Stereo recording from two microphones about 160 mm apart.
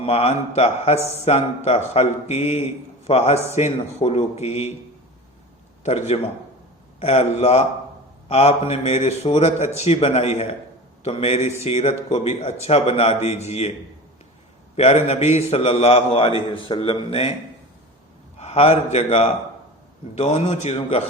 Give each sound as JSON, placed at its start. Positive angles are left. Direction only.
{"t": 0.0, "sound": "a man's voice", "side_deg": 40}
{"t": 5.8, "sound": "a man's voice", "side_deg": 45}
{"t": 14.8, "sound": "a man's voice", "side_deg": 40}
{"t": 18.3, "sound": "a man's voice", "side_deg": 40}